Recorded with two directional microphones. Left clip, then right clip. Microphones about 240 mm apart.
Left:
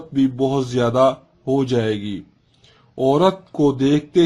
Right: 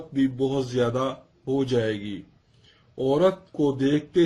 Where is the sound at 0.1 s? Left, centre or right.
Left.